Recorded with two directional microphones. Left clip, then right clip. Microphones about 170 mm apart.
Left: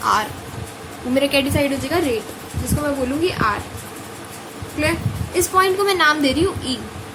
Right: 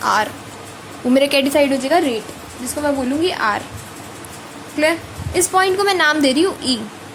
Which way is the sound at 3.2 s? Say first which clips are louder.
Right 1 dB; 45° right (ahead or behind).